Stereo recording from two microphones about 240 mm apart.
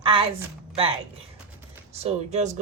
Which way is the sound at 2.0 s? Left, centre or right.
Right.